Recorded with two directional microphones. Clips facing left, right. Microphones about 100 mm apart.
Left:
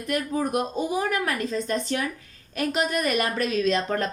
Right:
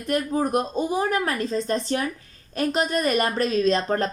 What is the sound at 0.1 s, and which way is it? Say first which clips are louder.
Speech: right 3 dB; 35° right (ahead or behind).